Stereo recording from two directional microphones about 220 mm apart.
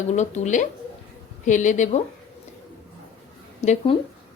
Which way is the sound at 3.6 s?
30° left (ahead or behind).